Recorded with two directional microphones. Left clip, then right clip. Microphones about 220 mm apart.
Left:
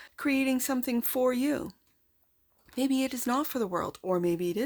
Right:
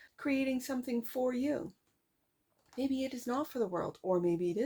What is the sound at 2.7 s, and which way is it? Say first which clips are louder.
Speech: left 6 dB; 40° left (ahead or behind).